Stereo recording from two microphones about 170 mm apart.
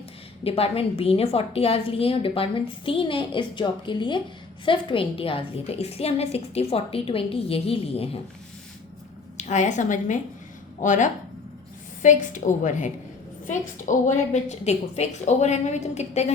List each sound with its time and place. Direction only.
0.4 s a woman's voice: 35° left (ahead or behind)
9.4 s a woman's voice: 45° left (ahead or behind)